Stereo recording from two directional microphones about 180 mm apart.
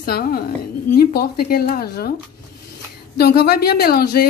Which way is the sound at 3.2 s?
60° left (ahead or behind).